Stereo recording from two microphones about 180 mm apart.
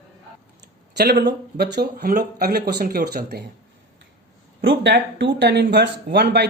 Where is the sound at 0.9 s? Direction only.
65° right (ahead or behind).